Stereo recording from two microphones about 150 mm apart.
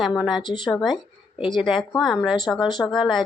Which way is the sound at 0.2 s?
Centre (ahead or behind).